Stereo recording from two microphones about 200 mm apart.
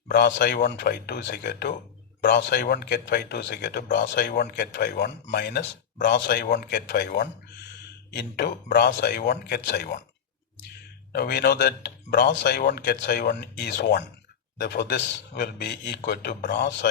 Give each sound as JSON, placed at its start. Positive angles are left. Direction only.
{"t": 0.1, "sound": "speech", "side_deg": 55}
{"t": 11.1, "sound": "speech", "side_deg": 55}